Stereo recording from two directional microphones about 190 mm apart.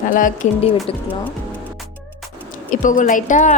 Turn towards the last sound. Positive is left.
turn(degrees=40)  # may be behind; listen again after turning